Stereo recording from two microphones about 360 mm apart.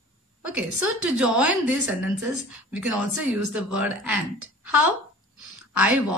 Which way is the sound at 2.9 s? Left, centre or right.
Right.